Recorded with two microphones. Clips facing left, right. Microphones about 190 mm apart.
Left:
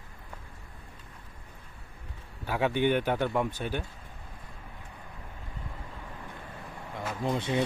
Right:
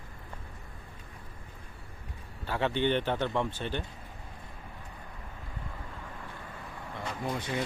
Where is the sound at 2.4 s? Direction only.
10° left (ahead or behind).